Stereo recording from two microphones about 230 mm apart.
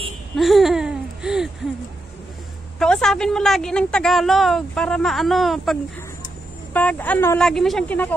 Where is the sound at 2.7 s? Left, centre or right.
Centre.